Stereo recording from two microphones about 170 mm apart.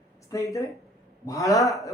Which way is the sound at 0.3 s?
20° left (ahead or behind).